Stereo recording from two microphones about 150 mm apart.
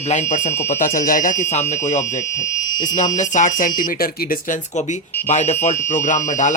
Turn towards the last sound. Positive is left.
turn(degrees=55)  # may be behind; listen again after turning